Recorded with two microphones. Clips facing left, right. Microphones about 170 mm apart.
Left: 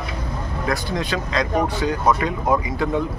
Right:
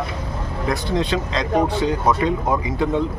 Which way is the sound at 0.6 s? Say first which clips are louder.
Right 3 dB; 25° right (ahead or behind).